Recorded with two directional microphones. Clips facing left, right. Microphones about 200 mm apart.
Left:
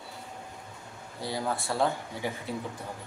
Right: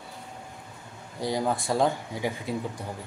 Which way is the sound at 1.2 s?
15° right (ahead or behind).